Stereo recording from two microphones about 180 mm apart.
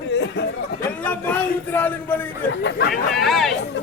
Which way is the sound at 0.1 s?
70° left (ahead or behind).